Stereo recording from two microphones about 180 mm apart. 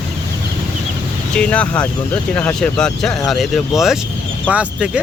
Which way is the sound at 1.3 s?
5° left (ahead or behind).